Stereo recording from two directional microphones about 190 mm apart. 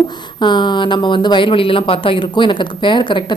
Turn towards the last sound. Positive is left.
turn(degrees=25)  # may be behind; listen again after turning